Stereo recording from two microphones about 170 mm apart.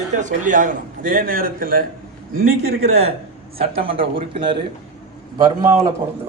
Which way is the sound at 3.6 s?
30° right (ahead or behind).